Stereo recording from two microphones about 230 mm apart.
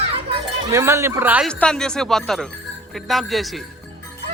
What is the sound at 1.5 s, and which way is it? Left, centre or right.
Speech, centre.